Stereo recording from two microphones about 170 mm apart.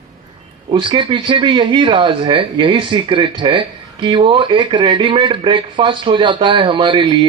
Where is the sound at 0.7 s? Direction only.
30° right (ahead or behind).